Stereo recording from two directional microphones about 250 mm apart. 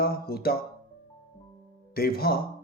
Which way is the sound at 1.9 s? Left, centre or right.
Left.